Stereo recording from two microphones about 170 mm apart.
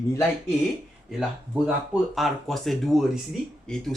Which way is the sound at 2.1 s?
Centre (ahead or behind).